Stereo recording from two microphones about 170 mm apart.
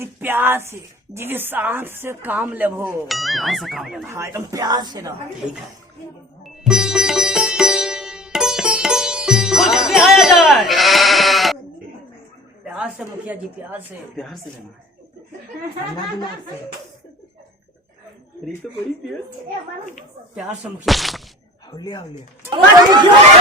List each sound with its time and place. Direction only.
0.0 s a woman's voice: 10° right (ahead or behind)
4.1 s speech: 15° right (ahead or behind)
6.4 s sitar: 5° right (ahead or behind)
12.6 s a woman's voice: 5° right (ahead or behind)
20.8 s speech: centre (ahead or behind)
21.8 s speech: 25° left (ahead or behind)
22.4 s speech: 30° right (ahead or behind)